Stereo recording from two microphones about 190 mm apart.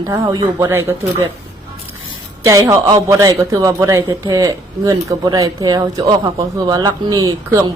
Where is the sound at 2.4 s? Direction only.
15° right (ahead or behind).